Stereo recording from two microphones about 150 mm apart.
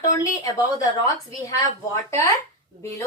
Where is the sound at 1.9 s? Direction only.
20° left (ahead or behind).